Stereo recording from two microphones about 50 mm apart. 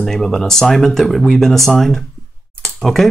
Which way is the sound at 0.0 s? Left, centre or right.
Centre.